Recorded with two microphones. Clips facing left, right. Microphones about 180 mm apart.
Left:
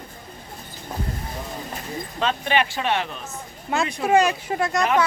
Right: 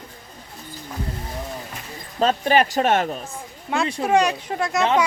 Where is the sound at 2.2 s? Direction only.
40° right (ahead or behind).